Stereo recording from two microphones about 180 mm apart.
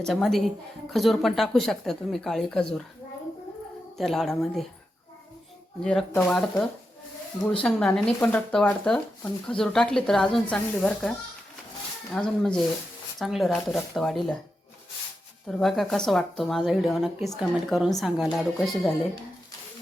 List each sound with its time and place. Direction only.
0.0 s speech: centre (ahead or behind)
3.9 s speech: centre (ahead or behind)
5.8 s speech: 5° left (ahead or behind)
12.1 s speech: 5° left (ahead or behind)
15.4 s speech: 5° left (ahead or behind)